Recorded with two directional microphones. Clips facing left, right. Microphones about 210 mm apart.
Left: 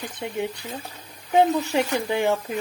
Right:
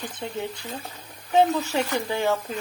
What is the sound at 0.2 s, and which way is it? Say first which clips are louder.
Speech: left 2 dB; 15° left (ahead or behind).